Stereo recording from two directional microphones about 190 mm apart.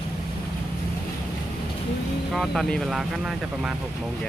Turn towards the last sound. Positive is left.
turn(degrees=0)  # may be behind; listen again after turning